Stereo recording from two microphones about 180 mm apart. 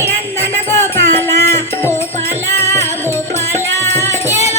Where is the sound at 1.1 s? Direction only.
15° left (ahead or behind).